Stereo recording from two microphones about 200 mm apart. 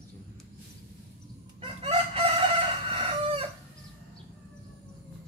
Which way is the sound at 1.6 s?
30° right (ahead or behind).